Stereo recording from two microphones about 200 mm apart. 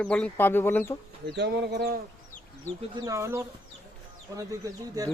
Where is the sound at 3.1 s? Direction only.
15° right (ahead or behind).